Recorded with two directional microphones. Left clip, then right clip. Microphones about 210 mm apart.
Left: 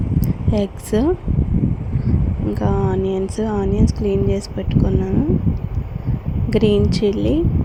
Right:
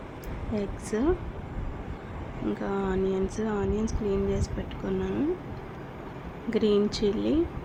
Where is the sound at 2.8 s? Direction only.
25° left (ahead or behind).